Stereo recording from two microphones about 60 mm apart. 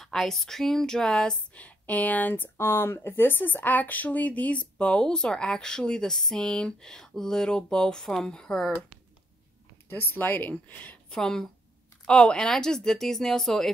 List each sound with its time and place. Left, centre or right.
0.0 s speech: centre
1.5 s speech: left; by 8.7 s centre
9.8 s a woman's voice: left
11.1 s speech: centre